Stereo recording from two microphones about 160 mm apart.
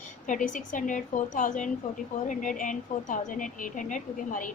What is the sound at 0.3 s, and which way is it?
A woman's voice, 55° left (ahead or behind).